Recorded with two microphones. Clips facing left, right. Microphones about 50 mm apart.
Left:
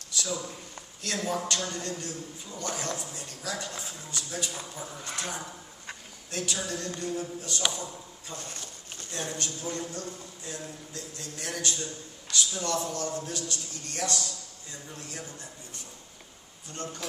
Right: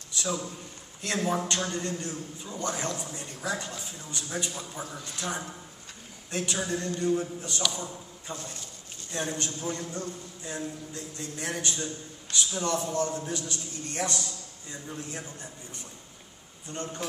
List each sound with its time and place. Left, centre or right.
0.1 s a sound: right
1.0 s a man's voice: right
5.0 s speech: left
6.3 s a man's voice: right
16.7 s a man's voice: right